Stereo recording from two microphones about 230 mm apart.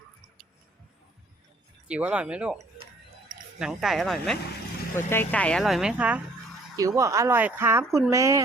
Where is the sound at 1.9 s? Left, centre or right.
Centre.